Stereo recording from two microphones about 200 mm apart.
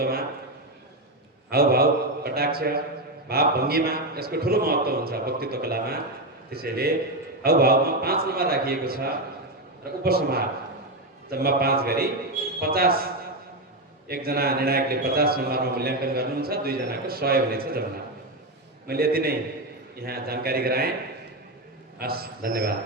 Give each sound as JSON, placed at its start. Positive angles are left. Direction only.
{"t": 0.0, "sound": "a man's voice", "side_deg": -50}
{"t": 1.5, "sound": "a man's voice", "side_deg": -50}
{"t": 14.1, "sound": "a man's voice", "side_deg": -50}
{"t": 18.9, "sound": "a man's voice", "side_deg": -50}
{"t": 21.9, "sound": "a man's voice", "side_deg": -50}